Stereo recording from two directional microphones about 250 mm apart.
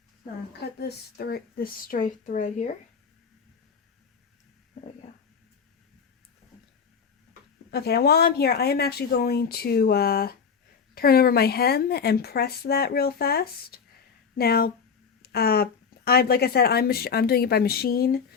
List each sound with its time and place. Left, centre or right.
0.8 s speech: left
7.7 s speech: left